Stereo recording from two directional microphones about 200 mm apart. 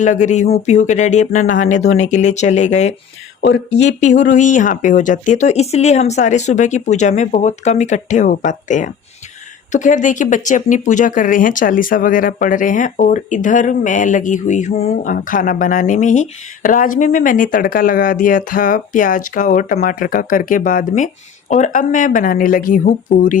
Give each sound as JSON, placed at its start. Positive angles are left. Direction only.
{"t": 0.0, "sound": "speech", "side_deg": 35}